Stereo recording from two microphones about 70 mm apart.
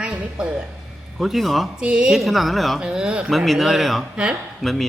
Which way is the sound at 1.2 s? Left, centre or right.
Centre.